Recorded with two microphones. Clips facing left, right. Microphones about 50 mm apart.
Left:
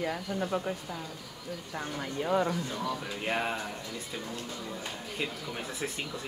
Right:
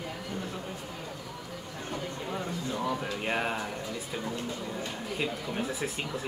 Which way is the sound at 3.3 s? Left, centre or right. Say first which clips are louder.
Even; centre.